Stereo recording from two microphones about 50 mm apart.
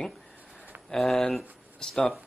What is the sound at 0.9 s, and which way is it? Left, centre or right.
Speech, centre.